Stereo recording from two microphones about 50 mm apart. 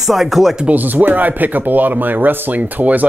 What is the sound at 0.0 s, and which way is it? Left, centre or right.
Speech, centre.